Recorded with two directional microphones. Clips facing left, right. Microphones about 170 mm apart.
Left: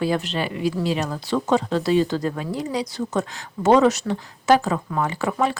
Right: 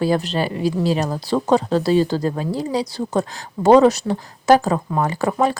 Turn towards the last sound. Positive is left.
turn(degrees=-40)  # may be behind; listen again after turning